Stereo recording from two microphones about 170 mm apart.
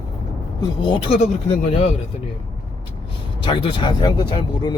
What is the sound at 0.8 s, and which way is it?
Speech, 30° left (ahead or behind).